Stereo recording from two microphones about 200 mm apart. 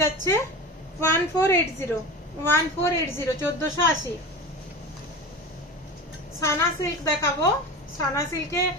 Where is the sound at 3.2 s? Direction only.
15° left (ahead or behind).